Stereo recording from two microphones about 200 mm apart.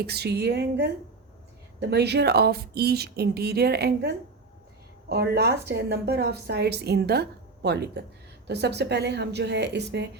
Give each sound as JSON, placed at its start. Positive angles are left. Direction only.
{"t": 0.0, "sound": "a woman's voice", "side_deg": -55}